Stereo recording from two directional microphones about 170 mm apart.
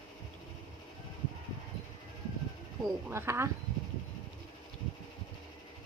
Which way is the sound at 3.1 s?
15° right (ahead or behind).